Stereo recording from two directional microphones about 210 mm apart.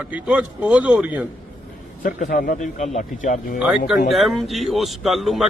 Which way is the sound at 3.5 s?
5° right (ahead or behind).